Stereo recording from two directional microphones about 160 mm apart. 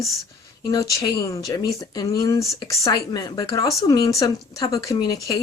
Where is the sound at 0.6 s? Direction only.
20° left (ahead or behind).